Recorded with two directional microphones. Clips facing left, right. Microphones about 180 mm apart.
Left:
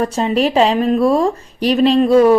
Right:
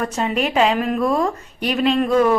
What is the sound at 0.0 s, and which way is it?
A woman's voice, 30° left (ahead or behind).